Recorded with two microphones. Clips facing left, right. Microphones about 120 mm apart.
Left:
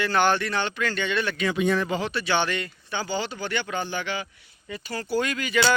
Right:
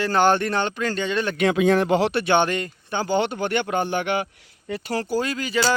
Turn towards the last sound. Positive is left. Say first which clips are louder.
# right 1 dB
turn(degrees=-35)  # may be behind; listen again after turning